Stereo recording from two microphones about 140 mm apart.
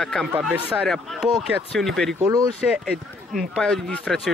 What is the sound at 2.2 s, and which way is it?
Speech, 25° right (ahead or behind).